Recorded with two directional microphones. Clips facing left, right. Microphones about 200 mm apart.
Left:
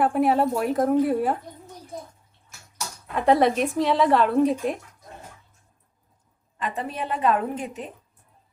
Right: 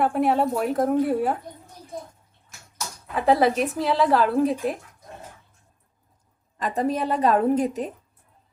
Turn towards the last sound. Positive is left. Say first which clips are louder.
# right 7 dB
turn(degrees=-40)  # may be behind; listen again after turning